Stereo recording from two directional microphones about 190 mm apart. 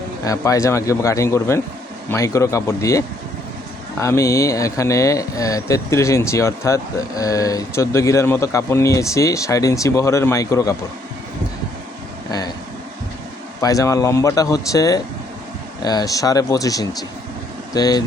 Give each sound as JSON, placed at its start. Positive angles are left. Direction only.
{"t": 0.3, "sound": "speech", "side_deg": 15}
{"t": 4.0, "sound": "speech", "side_deg": 15}
{"t": 13.6, "sound": "speech", "side_deg": 15}